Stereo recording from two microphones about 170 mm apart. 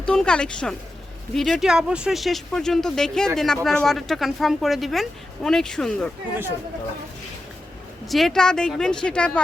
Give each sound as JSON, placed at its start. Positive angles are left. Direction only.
{"t": 0.0, "sound": "speech", "side_deg": 5}
{"t": 8.0, "sound": "speech", "side_deg": 0}